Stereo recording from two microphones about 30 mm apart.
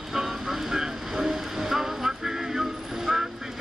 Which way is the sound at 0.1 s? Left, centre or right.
Centre.